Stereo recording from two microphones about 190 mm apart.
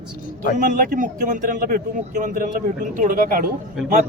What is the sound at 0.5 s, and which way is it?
Speech, 45° right (ahead or behind).